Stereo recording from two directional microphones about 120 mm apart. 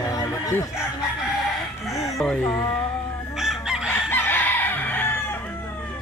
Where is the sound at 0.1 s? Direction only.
20° left (ahead or behind).